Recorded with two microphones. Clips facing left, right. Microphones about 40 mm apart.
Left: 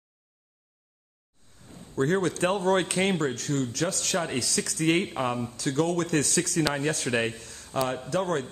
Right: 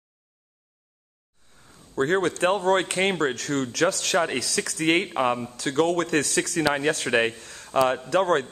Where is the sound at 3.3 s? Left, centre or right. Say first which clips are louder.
Right 2 dB; right.